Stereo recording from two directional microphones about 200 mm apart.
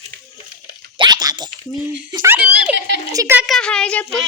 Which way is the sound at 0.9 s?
20° right (ahead or behind).